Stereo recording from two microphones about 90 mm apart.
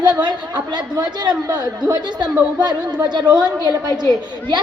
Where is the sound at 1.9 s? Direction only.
55° right (ahead or behind).